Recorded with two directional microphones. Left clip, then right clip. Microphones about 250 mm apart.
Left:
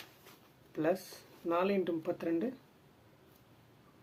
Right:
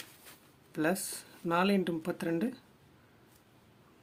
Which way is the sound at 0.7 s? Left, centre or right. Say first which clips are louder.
Right 1 dB; right.